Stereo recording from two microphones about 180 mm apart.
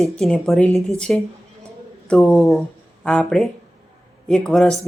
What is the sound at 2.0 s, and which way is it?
Speech, 5° left (ahead or behind).